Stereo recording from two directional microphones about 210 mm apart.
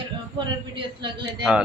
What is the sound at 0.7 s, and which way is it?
Speech, 25° right (ahead or behind).